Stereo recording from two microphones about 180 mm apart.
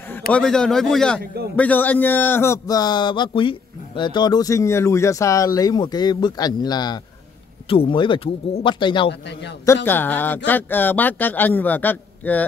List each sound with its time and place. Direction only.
0.3 s speech: 5° left (ahead or behind)
1.2 s a man's voice: 65° right (ahead or behind)
1.6 s speech: 10° left (ahead or behind); by 9.1 s 25° left (ahead or behind)
9.8 s speech: 10° left (ahead or behind)